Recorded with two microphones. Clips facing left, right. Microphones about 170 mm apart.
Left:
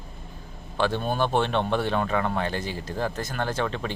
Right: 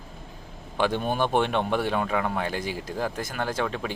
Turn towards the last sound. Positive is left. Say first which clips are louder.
# even
turn(degrees=-5)  # may be behind; listen again after turning